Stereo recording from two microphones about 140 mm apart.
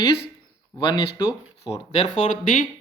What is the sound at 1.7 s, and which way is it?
Speech, 45° left (ahead or behind).